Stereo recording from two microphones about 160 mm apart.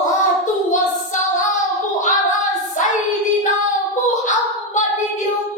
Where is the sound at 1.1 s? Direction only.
50° left (ahead or behind).